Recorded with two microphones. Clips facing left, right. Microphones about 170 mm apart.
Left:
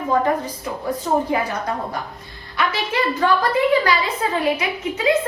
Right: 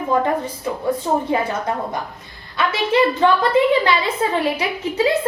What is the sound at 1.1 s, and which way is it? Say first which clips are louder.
Speech: left 2 dB; 25° right (ahead or behind).